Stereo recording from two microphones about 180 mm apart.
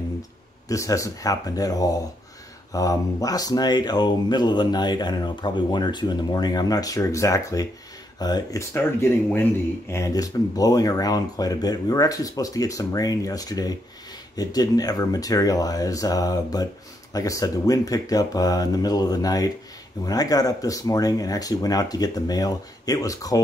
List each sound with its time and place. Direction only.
0.7 s speech: 20° left (ahead or behind)